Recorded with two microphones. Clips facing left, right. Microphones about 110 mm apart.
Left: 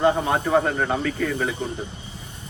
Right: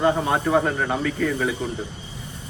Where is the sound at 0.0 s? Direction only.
Centre (ahead or behind).